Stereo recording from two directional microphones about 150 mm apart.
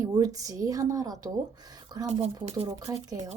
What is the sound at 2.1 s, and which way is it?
Speech, 45° right (ahead or behind).